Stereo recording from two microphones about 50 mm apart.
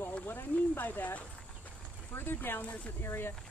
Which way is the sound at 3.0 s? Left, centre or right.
Left.